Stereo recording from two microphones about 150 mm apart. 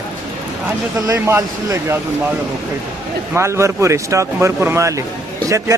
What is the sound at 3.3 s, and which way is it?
Speech, 20° right (ahead or behind).